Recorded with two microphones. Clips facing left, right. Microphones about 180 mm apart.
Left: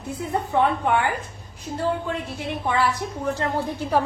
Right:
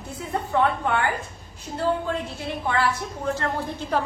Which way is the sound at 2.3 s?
15° left (ahead or behind).